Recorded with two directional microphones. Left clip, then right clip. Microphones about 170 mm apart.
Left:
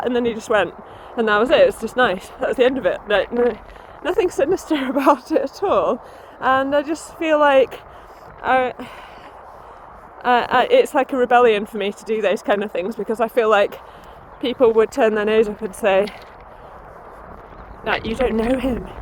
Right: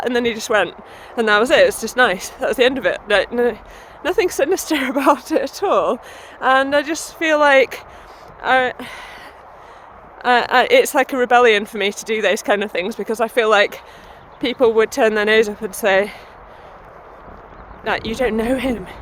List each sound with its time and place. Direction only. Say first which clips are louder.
0.3 s speech: right 1 dB; 10° right (ahead or behind)
1.1 s speech: right 2 dB; 25° right (ahead or behind)
10.2 s speech: right 2 dB; 20° right (ahead or behind)
17.8 s speech: right 1 dB; 20° right (ahead or behind)